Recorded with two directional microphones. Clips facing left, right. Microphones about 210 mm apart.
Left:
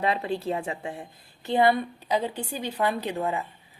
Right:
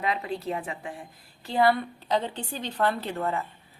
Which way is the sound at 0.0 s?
30° left (ahead or behind).